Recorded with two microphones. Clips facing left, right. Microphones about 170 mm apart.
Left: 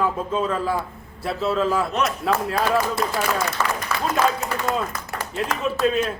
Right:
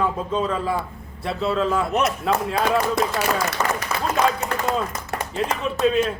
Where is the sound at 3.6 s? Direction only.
25° right (ahead or behind).